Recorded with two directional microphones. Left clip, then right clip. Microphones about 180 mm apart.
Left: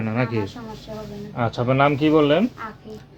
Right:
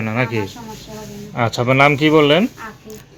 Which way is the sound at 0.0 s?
10° right (ahead or behind).